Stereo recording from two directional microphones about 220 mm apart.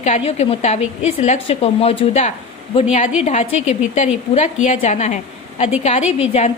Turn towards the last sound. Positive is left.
turn(degrees=30)  # may be behind; listen again after turning